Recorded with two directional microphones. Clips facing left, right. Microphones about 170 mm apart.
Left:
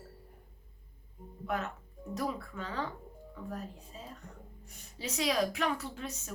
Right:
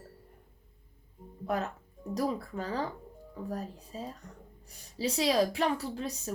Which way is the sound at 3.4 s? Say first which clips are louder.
Right 4 dB; 35° right (ahead or behind).